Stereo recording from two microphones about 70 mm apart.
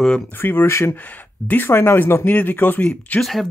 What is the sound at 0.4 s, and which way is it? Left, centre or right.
Speech, left.